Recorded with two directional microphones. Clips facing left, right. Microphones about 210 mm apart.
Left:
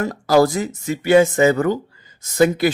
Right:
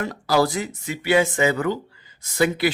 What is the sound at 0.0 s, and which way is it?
Speech, 45° left (ahead or behind).